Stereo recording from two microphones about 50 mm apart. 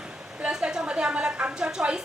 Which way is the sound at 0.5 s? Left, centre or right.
Centre.